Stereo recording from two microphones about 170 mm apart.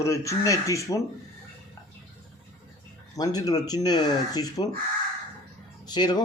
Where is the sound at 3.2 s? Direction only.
20° left (ahead or behind).